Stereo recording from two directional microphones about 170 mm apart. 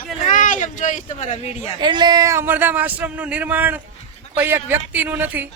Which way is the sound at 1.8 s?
25° right (ahead or behind).